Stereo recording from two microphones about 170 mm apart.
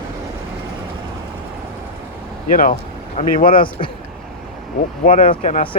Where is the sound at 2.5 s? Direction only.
55° left (ahead or behind).